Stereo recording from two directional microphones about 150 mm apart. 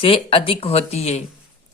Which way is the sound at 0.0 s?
35° left (ahead or behind).